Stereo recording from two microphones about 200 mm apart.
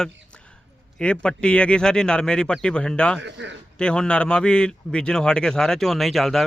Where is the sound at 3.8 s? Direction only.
5° left (ahead or behind).